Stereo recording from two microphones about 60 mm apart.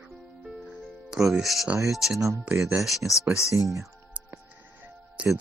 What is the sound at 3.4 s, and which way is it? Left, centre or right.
Speech, right.